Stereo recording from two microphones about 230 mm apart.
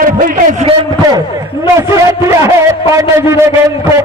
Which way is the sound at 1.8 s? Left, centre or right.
Centre.